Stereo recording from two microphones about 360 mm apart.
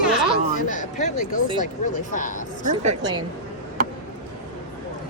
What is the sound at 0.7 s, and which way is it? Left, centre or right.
Speech, left.